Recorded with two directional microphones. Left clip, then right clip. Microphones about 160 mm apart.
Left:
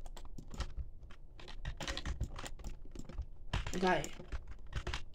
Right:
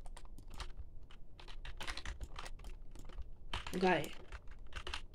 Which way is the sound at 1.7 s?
10° left (ahead or behind).